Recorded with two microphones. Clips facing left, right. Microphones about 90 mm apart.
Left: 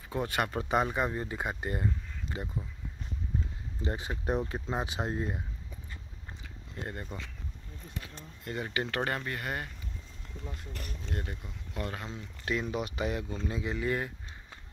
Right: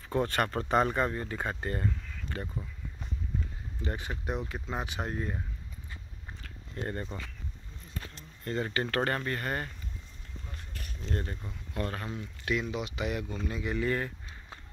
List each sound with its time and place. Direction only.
0.1 s speech: 5° left (ahead or behind)
3.8 s speech: 25° left (ahead or behind)
6.4 s a sound: 5° left (ahead or behind)
8.6 s speech: 10° left (ahead or behind)
11.1 s speech: 10° left (ahead or behind)
12.4 s speech: 35° left (ahead or behind)
13.5 s speech: 25° left (ahead or behind)